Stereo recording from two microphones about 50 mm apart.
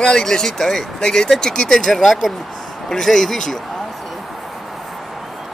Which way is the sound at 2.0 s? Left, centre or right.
Centre.